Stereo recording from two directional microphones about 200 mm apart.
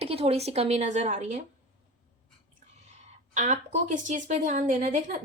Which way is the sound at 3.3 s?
35° right (ahead or behind).